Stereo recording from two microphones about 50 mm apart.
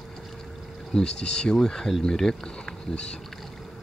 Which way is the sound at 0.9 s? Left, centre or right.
Centre.